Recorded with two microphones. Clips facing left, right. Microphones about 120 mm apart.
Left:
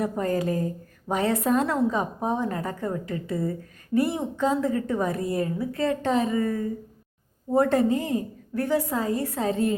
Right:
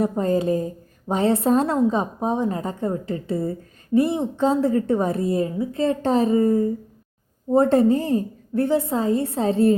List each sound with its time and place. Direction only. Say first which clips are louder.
0.0 s a woman's voice: right 5 dB; 25° right (ahead or behind)